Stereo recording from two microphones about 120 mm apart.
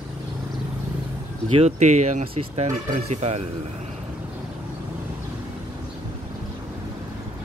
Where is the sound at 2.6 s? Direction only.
70° right (ahead or behind).